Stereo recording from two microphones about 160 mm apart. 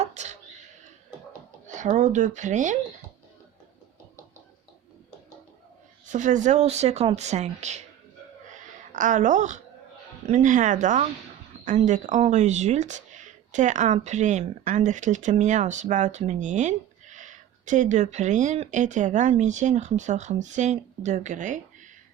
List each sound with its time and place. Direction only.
0.0 s a sound: 45° right (ahead or behind)
1.6 s speech: 50° right (ahead or behind)
6.1 s speech: 50° right (ahead or behind)
8.9 s speech: 50° right (ahead or behind)